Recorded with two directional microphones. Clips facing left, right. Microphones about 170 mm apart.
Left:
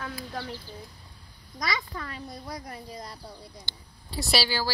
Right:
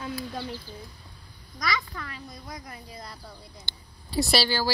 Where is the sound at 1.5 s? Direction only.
30° left (ahead or behind).